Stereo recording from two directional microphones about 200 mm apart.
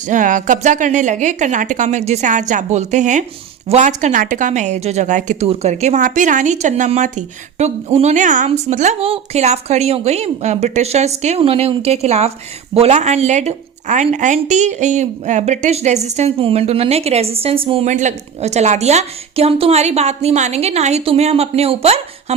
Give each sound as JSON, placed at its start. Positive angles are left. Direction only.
{"t": 0.0, "sound": "speech", "side_deg": -40}